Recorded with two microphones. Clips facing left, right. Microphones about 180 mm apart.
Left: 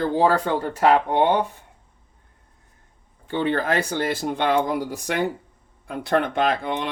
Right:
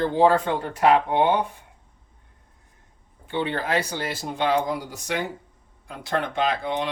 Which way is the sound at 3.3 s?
45° left (ahead or behind).